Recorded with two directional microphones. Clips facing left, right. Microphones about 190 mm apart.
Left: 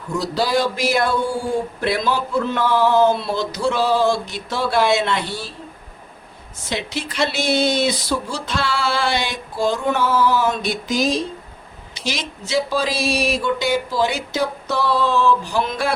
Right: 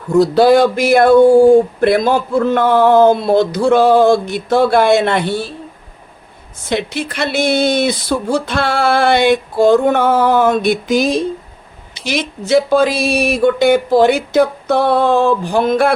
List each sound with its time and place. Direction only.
0.2 s a man's voice: 55° right (ahead or behind)
6.7 s speech: 55° right (ahead or behind)